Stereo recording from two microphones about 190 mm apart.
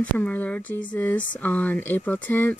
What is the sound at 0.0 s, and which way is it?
Speech, 10° left (ahead or behind).